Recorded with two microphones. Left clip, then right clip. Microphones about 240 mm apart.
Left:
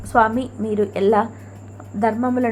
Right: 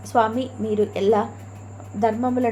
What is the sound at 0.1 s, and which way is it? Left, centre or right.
A woman's voice, centre.